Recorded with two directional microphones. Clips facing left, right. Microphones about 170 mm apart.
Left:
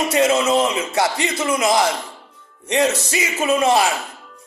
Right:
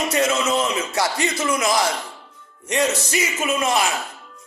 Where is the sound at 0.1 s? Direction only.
30° left (ahead or behind).